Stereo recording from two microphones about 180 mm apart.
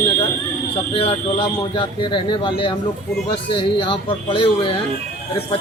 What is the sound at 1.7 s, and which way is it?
Speech, 25° left (ahead or behind).